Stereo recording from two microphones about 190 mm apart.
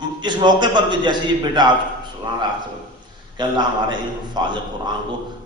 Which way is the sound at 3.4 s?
25° right (ahead or behind).